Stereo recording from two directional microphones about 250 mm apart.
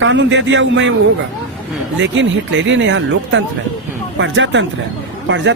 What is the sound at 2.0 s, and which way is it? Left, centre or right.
Speech, right.